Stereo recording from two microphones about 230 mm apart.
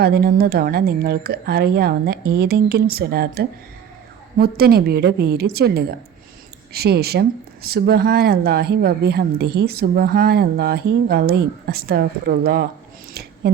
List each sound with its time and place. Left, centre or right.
0.0 s speech: right